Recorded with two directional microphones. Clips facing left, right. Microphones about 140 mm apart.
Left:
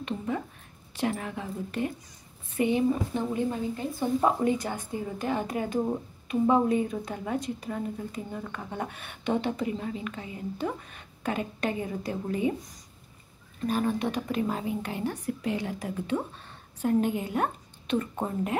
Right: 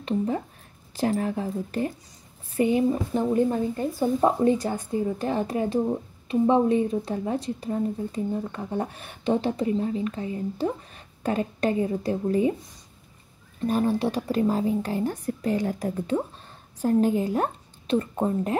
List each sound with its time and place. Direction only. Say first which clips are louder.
0.9 s a woman's voice: right 5 dB; 35° right (ahead or behind)
13.7 s a woman's voice: right 4 dB; 30° right (ahead or behind)